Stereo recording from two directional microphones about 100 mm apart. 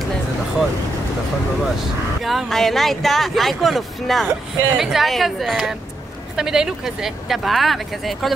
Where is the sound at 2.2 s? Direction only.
Centre (ahead or behind).